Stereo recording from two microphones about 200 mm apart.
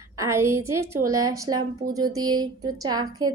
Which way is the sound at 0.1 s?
15° right (ahead or behind).